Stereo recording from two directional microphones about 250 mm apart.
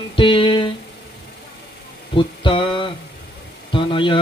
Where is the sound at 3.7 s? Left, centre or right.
Centre.